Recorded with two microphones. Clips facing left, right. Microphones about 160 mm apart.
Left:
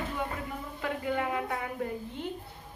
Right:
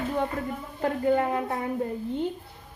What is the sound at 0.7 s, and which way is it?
Speech, 40° right (ahead or behind).